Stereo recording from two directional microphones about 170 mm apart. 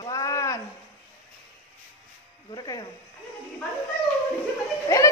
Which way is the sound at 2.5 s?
25° left (ahead or behind).